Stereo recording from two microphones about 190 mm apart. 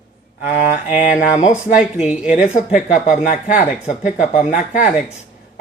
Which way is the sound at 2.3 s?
40° left (ahead or behind).